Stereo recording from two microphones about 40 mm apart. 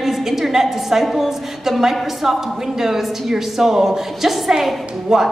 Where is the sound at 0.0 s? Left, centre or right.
Centre.